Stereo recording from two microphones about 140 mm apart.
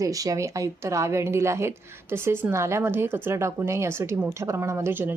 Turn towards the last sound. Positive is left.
turn(degrees=-15)  # may be behind; listen again after turning